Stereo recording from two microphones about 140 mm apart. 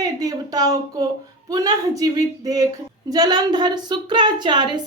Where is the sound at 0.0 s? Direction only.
25° right (ahead or behind).